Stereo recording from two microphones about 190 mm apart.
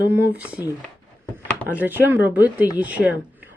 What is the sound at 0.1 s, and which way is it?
Speech, 10° right (ahead or behind).